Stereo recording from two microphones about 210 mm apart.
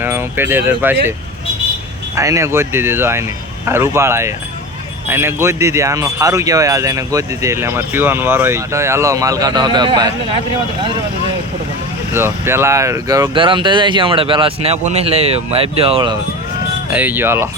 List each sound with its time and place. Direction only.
0.0 s speech: 10° right (ahead or behind)
2.1 s speech: 15° right (ahead or behind)
12.1 s speech: 10° right (ahead or behind)
16.9 s speech: 10° right (ahead or behind)